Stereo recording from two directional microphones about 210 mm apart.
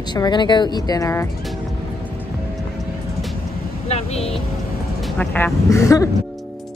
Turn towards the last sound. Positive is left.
turn(degrees=15)  # may be behind; listen again after turning